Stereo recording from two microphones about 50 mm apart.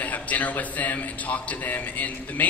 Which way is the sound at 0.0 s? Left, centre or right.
Left.